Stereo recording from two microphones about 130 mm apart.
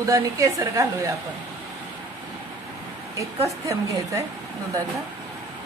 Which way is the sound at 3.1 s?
25° right (ahead or behind).